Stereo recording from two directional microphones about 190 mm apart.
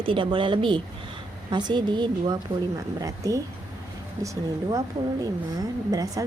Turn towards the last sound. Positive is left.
turn(degrees=-15)  # may be behind; listen again after turning